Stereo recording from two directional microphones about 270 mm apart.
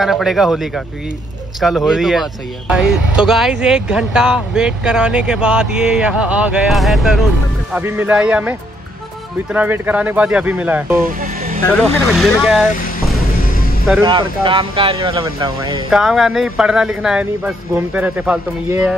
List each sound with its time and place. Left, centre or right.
0.0 s speech: centre
11.1 s vehicle: right
11.7 s speech: centre
14.0 s speech: centre
15.9 s speech: centre